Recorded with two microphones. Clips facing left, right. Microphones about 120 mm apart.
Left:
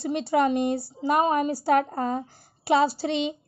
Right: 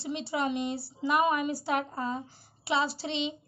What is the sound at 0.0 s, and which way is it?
A woman's voice, 50° left (ahead or behind).